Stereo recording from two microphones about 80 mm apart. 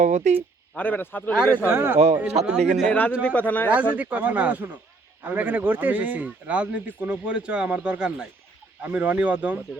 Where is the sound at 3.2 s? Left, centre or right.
Centre.